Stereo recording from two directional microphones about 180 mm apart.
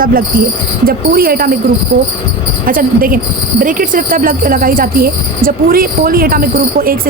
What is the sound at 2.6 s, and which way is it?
Speech, 50° right (ahead or behind).